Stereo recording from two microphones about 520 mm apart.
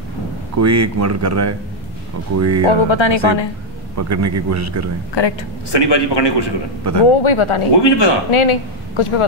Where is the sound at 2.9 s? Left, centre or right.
Left.